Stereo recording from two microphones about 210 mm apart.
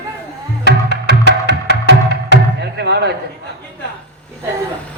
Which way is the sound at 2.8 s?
55° right (ahead or behind).